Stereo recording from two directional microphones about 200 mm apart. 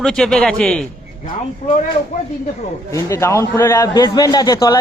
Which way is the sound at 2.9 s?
15° left (ahead or behind).